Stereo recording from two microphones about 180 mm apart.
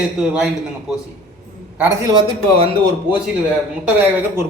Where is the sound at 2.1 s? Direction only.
30° right (ahead or behind).